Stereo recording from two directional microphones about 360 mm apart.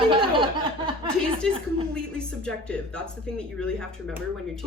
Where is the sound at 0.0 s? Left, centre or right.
Centre.